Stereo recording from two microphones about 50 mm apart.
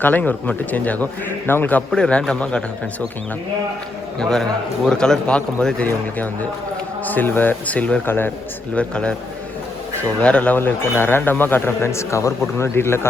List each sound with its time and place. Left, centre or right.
0.0 s speech: left
1.5 s speech: left
2.0 s a man's voice: left
4.2 s a man's voice: centre
7.0 s speech: left
8.0 s speech: left
8.7 s a man's voice: left
10.2 s a man's voice: left
10.5 s speech: left
11.8 s a man's voice: left